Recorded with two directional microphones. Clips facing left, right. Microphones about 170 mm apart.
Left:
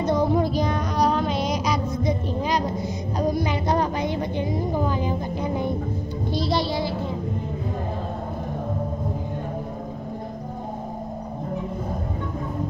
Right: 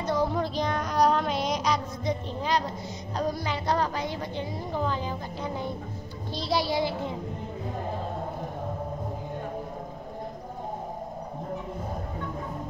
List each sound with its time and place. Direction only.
0.0 s music: 20° left (ahead or behind)
3.2 s a sound: 15° left (ahead or behind)
6.5 s child singing: 10° right (ahead or behind)